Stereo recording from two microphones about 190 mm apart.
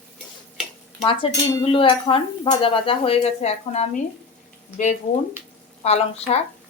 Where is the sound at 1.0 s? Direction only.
30° left (ahead or behind).